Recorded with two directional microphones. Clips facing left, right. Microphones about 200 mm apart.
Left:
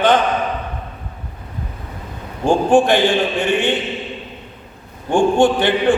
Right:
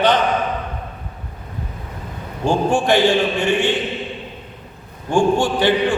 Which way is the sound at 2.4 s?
55° left (ahead or behind).